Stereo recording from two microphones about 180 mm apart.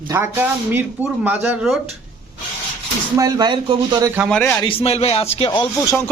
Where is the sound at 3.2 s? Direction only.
25° right (ahead or behind).